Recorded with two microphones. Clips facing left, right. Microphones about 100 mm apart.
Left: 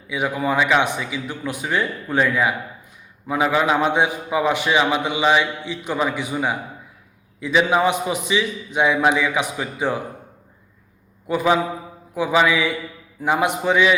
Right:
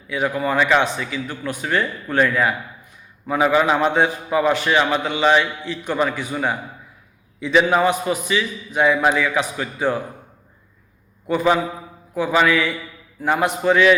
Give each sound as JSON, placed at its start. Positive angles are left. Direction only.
{"t": 0.1, "sound": "a man's voice", "side_deg": 15}
{"t": 7.8, "sound": "a man's voice", "side_deg": 15}
{"t": 11.3, "sound": "a man's voice", "side_deg": 5}